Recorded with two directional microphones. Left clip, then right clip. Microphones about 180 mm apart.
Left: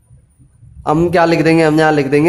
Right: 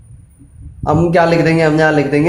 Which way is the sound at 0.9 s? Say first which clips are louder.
Even; 50° left (ahead or behind).